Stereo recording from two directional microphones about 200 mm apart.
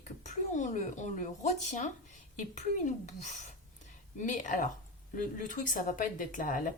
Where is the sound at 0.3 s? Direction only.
40° left (ahead or behind).